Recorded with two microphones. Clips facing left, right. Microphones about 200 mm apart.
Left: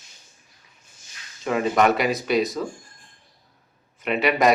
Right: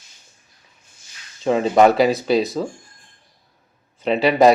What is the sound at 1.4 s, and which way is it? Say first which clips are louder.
Speech: right 6 dB; 30° right (ahead or behind).